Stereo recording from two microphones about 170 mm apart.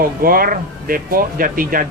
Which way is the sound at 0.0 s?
60° right (ahead or behind).